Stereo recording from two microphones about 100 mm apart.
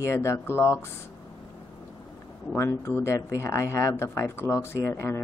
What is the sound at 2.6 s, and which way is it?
Speech, 30° left (ahead or behind).